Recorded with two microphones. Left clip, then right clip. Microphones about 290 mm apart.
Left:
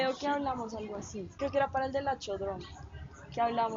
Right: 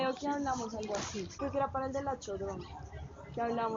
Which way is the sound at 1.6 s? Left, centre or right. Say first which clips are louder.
Left 4 dB; left.